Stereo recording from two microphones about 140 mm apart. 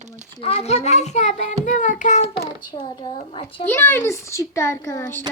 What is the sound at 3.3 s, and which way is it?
Speech, 40° left (ahead or behind).